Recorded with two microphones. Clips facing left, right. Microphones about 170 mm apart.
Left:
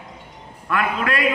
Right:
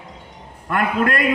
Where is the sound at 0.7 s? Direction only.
50° right (ahead or behind).